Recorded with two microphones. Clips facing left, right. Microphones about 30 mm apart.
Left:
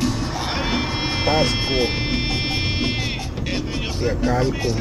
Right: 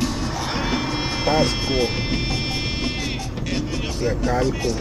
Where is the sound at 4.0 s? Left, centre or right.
Centre.